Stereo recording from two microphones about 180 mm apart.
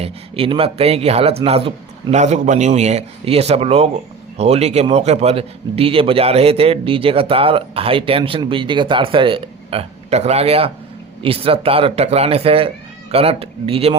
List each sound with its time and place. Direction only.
0.0 s speech: 30° right (ahead or behind)